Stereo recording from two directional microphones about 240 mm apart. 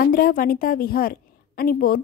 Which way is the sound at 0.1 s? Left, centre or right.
Left.